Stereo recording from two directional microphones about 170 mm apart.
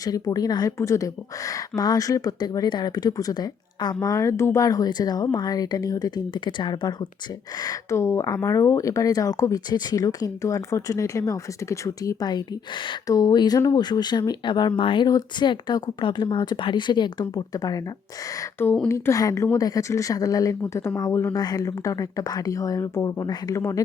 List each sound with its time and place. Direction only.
0.0 s speech: 20° left (ahead or behind)